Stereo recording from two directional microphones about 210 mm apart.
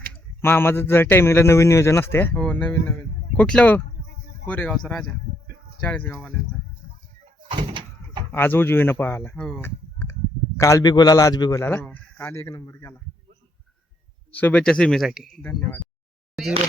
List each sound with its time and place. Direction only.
0.1 s speech: 10° left (ahead or behind)
7.5 s door: 25° right (ahead or behind)
8.3 s speech: 10° left (ahead or behind)
14.3 s speech: 5° left (ahead or behind)